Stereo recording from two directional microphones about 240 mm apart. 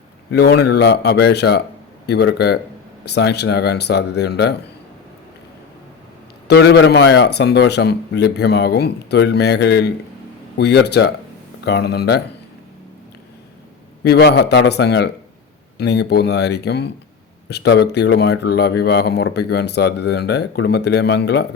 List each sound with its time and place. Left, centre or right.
0.3 s a man's voice: left
6.5 s a man's voice: left
14.0 s a man's voice: left